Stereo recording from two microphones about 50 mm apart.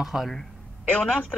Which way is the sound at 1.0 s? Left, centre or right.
Centre.